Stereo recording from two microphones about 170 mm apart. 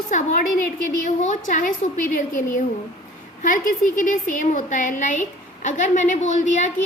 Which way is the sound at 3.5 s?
50° left (ahead or behind).